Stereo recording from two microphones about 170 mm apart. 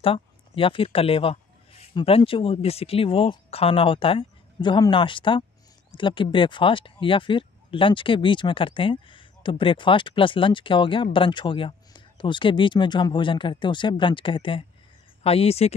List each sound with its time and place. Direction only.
0.0 s a man's voice: 30° left (ahead or behind)